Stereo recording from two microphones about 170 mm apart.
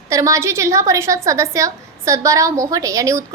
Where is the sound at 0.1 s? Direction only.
20° right (ahead or behind).